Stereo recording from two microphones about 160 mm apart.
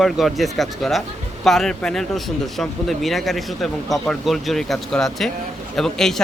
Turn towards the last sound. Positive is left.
turn(degrees=5)  # may be behind; listen again after turning